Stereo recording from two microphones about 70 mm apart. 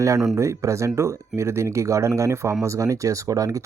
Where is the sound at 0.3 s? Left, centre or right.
Right.